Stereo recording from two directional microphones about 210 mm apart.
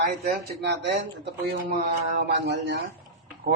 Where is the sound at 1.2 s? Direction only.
50° right (ahead or behind).